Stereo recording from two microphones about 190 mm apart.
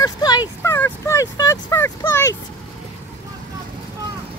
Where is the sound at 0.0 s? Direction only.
20° left (ahead or behind).